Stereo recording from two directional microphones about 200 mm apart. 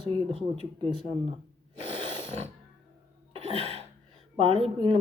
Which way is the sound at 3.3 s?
30° right (ahead or behind).